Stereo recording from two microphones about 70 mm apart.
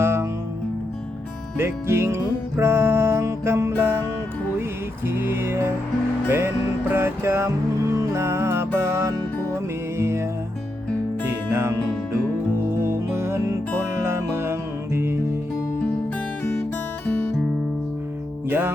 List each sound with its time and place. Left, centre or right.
0.0 s music: right
1.5 s music: right
5.0 s music: right
12.6 s music: right
16.4 s guitar: left
18.4 s music: right